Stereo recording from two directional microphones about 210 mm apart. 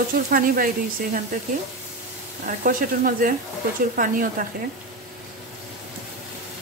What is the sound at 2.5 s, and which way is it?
Frying, 40° right (ahead or behind).